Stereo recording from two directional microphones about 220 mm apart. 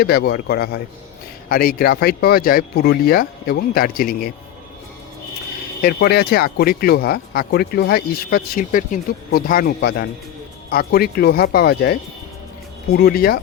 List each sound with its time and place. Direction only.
0.0 s speech: 45° left (ahead or behind)
5.8 s speech: 45° left (ahead or behind)